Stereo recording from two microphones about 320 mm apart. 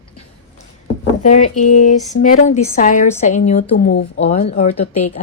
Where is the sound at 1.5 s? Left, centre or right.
Left.